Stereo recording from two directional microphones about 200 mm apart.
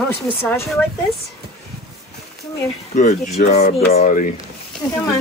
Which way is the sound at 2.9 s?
40° left (ahead or behind).